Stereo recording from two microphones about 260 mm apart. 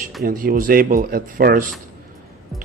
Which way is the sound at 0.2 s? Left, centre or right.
Right.